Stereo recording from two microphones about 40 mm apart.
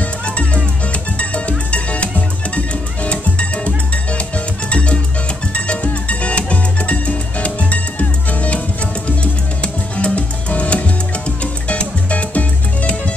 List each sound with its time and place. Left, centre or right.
1.2 s music: left